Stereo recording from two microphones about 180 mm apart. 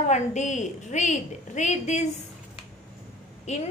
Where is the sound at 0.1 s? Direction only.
40° left (ahead or behind).